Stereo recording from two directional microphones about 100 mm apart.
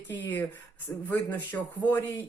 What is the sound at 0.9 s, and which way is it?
Speech, 10° left (ahead or behind).